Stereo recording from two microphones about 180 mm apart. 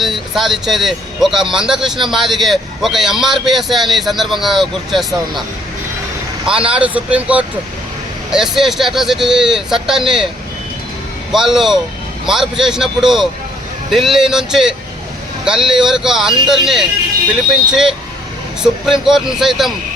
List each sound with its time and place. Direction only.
0.0 s a man's voice: centre (ahead or behind)
6.5 s a man's voice: 5° right (ahead or behind)
11.3 s a man's voice: centre (ahead or behind)